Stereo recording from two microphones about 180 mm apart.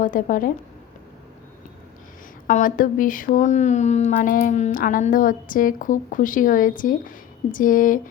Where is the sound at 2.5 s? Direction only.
50° left (ahead or behind).